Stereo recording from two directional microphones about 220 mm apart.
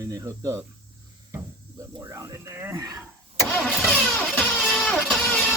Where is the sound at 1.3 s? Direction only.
15° right (ahead or behind).